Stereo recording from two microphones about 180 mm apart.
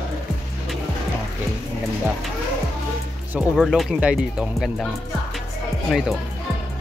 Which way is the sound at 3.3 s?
Centre (ahead or behind).